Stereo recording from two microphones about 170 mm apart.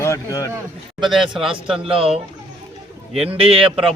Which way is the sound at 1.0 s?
Centre (ahead or behind).